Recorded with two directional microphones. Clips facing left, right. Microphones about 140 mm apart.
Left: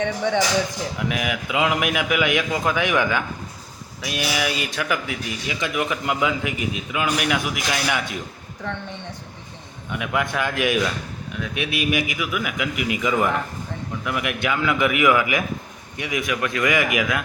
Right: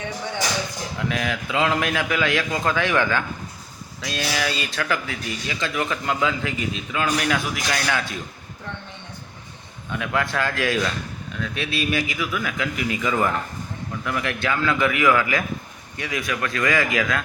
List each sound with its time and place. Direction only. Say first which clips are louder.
0.9 s speech: right 1 dB; 15° left (ahead or behind)
9.9 s speech: even; 15° left (ahead or behind)